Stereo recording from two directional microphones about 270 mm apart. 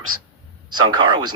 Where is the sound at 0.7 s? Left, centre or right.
Centre.